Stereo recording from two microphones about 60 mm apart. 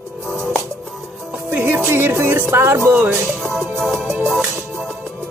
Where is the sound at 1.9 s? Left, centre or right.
Right.